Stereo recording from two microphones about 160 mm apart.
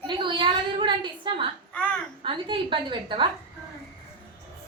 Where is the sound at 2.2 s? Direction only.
30° right (ahead or behind).